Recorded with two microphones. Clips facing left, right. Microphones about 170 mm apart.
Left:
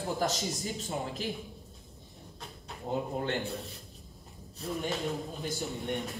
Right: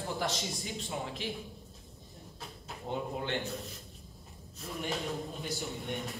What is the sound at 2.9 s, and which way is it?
Speech, 40° left (ahead or behind).